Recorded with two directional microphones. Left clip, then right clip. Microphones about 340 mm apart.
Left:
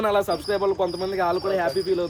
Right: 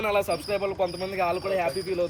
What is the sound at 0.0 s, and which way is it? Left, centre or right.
Speech, left.